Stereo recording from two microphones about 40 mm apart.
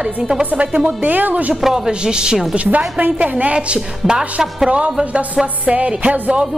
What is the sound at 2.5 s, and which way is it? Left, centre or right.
A woman's voice, right.